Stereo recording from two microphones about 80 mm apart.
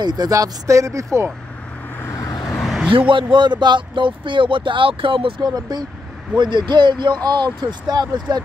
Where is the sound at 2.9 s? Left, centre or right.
Right.